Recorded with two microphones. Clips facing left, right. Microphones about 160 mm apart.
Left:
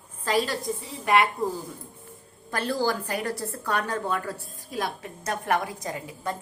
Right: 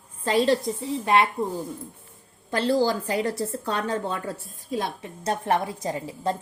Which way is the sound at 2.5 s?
25° right (ahead or behind).